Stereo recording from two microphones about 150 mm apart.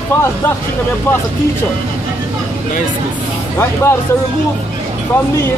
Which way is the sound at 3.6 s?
15° left (ahead or behind).